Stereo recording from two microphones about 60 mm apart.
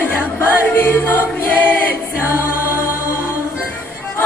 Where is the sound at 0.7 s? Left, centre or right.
Left.